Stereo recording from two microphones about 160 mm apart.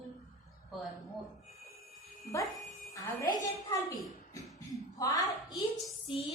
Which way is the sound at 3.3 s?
20° left (ahead or behind).